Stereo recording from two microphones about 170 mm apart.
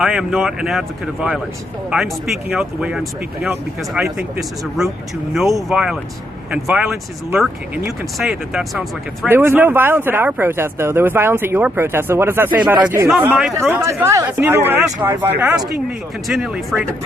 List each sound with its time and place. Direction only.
0.0 s speech: centre (ahead or behind)
9.3 s speech: 10° right (ahead or behind)